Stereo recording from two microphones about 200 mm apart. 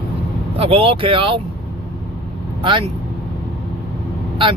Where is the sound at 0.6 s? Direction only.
30° right (ahead or behind).